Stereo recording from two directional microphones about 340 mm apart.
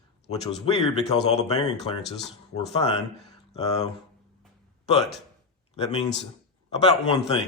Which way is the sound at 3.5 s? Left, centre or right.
Centre.